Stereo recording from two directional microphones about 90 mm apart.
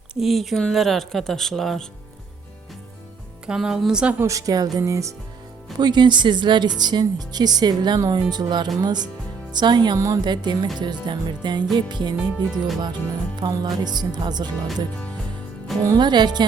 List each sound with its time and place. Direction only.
0.1 s speech: 5° right (ahead or behind)
3.4 s speech: 5° right (ahead or behind)
4.2 s a woman's voice: 35° right (ahead or behind)
5.8 s speech: 55° right (ahead or behind)
12.5 s speech: centre (ahead or behind)
13.3 s speech: 50° right (ahead or behind)
15.8 s speech: 50° right (ahead or behind)